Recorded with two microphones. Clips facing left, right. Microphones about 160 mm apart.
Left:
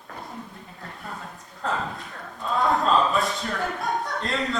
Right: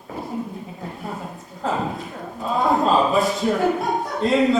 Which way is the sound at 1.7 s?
20° right (ahead or behind).